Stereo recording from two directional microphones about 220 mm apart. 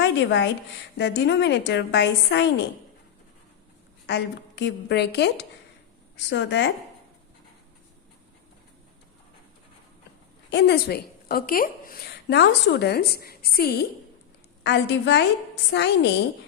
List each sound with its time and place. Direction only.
0.0 s a woman's voice: 55° left (ahead or behind)
4.0 s a woman's voice: 50° left (ahead or behind)
10.5 s a woman's voice: 50° left (ahead or behind)